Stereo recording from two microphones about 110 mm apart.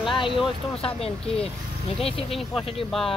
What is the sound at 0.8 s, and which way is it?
Speech, 65° left (ahead or behind).